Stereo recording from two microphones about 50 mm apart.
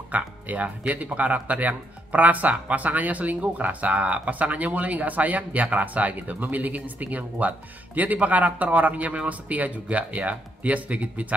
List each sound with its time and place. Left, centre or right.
0.1 s speech: right